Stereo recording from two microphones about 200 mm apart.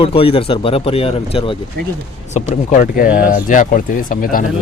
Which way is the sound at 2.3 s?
40° left (ahead or behind).